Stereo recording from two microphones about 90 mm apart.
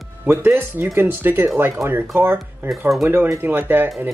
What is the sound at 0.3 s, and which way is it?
Speech, 25° right (ahead or behind).